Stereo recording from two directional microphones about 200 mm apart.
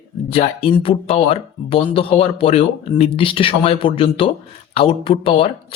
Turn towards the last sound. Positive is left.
turn(degrees=25)  # may be behind; listen again after turning